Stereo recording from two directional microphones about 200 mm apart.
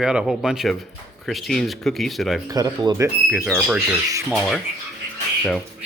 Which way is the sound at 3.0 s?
5° right (ahead or behind).